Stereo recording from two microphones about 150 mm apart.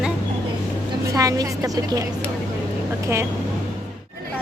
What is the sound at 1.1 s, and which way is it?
Speech, 25° right (ahead or behind).